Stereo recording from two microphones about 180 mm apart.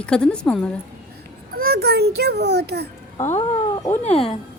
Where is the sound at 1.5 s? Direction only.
55° right (ahead or behind).